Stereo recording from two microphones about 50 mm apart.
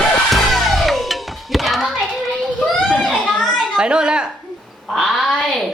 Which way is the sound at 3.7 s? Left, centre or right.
Centre.